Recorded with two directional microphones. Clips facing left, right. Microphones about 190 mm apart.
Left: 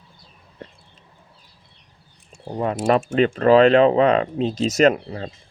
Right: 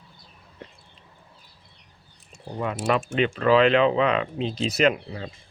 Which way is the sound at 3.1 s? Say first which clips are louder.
Left 5 dB; 45° left (ahead or behind).